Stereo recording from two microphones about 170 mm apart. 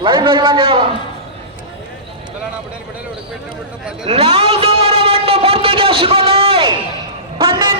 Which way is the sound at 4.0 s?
35° right (ahead or behind).